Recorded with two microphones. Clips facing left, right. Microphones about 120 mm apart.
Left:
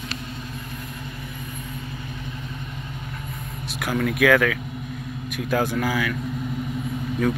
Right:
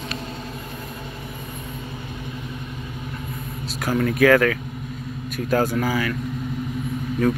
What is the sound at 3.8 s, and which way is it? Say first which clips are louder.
Speech: right 3 dB; centre (ahead or behind).